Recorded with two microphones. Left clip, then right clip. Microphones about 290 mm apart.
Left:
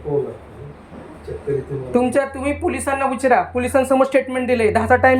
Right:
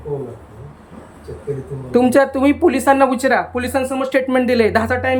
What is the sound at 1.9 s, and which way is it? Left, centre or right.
Speech, centre.